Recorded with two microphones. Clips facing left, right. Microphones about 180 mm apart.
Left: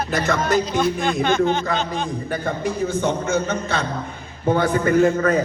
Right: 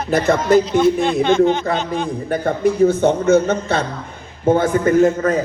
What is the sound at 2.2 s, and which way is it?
A man's voice, 55° right (ahead or behind).